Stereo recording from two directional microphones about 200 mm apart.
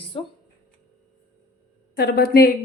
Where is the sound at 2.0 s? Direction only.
50° left (ahead or behind).